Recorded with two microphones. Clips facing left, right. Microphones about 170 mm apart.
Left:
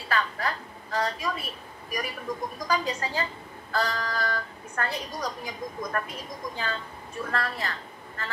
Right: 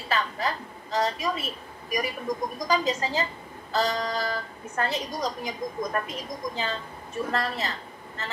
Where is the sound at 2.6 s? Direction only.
20° right (ahead or behind).